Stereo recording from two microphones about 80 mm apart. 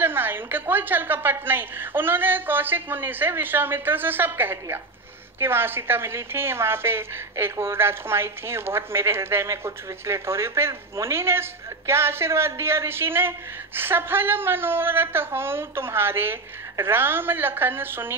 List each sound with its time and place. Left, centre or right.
0.0 s a woman's voice: right